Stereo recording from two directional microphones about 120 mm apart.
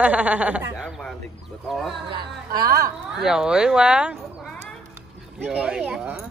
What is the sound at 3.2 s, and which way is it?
Speech, 5° right (ahead or behind).